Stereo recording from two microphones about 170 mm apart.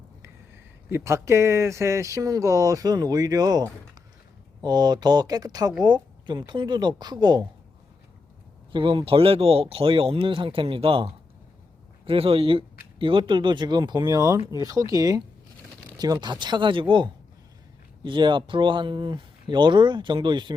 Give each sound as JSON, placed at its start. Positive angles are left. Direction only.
{"t": 0.9, "sound": "speech", "side_deg": -15}
{"t": 8.7, "sound": "speech", "side_deg": -30}